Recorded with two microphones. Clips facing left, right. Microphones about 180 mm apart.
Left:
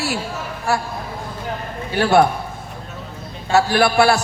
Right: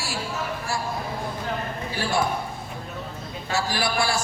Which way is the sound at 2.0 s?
65° left (ahead or behind).